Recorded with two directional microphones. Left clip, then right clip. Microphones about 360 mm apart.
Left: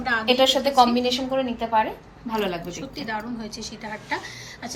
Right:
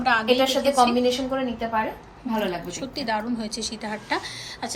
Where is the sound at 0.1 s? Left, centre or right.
Centre.